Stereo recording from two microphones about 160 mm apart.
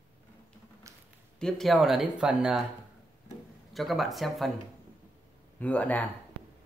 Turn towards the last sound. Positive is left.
turn(degrees=10)  # may be behind; listen again after turning